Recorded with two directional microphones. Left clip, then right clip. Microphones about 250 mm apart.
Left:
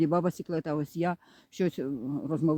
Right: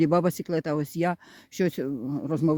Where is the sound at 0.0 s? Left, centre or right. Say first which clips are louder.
Right 4 dB; right.